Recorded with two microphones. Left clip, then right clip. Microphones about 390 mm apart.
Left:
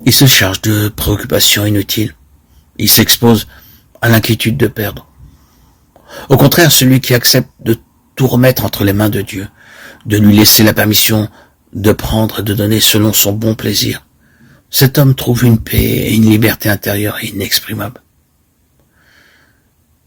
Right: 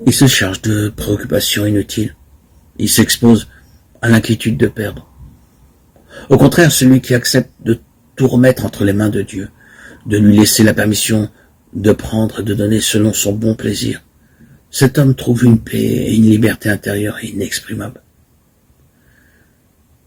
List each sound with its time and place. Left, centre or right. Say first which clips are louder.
0.0 s speech: left 3 dB; left
6.1 s a sound: left 3 dB; left
6.5 s speech: left 2 dB; left